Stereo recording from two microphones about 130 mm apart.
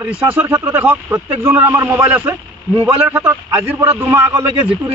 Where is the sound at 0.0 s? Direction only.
15° right (ahead or behind).